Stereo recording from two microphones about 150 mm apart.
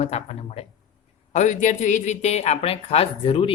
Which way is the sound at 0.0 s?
45° left (ahead or behind).